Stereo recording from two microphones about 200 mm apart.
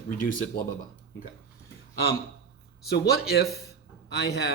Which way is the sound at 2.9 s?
50° left (ahead or behind).